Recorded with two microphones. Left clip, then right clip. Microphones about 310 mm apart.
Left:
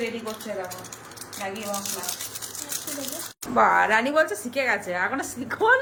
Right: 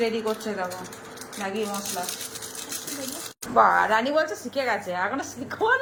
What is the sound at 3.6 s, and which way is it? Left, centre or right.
A woman's voice, centre.